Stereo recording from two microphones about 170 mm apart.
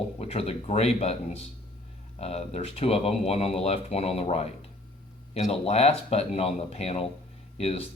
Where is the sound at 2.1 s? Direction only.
40° left (ahead or behind).